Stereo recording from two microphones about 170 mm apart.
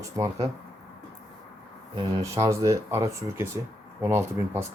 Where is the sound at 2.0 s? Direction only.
20° right (ahead or behind).